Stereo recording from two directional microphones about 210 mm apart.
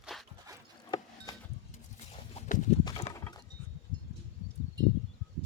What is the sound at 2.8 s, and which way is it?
Clip-clop, 25° left (ahead or behind).